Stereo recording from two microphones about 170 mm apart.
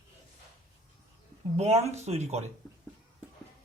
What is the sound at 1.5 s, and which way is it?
Speech, 40° right (ahead or behind).